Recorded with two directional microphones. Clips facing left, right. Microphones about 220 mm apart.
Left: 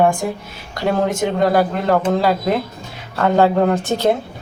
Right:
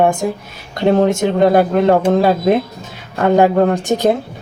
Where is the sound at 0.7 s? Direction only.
25° right (ahead or behind).